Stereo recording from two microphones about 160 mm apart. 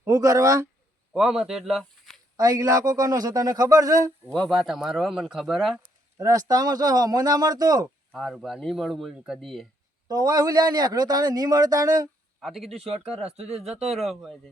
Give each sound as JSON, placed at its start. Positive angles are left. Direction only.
{"t": 0.0, "sound": "speech", "side_deg": -20}
{"t": 1.1, "sound": "speech", "side_deg": -5}
{"t": 2.3, "sound": "speech", "side_deg": -20}
{"t": 4.3, "sound": "speech", "side_deg": 0}
{"t": 6.1, "sound": "speech", "side_deg": -20}
{"t": 8.1, "sound": "speech", "side_deg": 0}
{"t": 10.1, "sound": "speech", "side_deg": -25}
{"t": 12.4, "sound": "speech", "side_deg": 0}
{"t": 12.9, "sound": "speech", "side_deg": -40}
{"t": 13.4, "sound": "speech", "side_deg": -5}